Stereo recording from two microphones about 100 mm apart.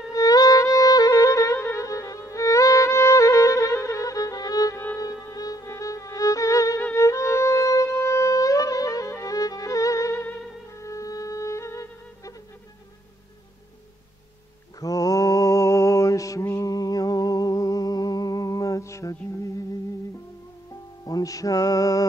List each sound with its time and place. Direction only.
0.1 s music: 35° left (ahead or behind)
14.8 s mantra: 35° left (ahead or behind)
21.0 s music: 35° left (ahead or behind)